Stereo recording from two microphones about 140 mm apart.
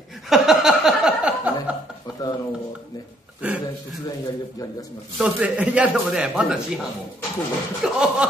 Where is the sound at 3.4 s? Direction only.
10° right (ahead or behind).